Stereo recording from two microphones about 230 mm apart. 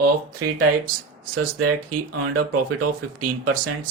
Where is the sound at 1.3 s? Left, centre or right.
Right.